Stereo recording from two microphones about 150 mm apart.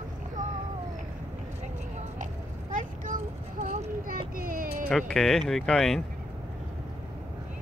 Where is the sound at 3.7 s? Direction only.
65° right (ahead or behind).